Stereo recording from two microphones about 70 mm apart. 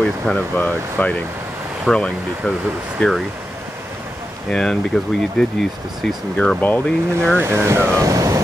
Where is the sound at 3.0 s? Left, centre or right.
Centre.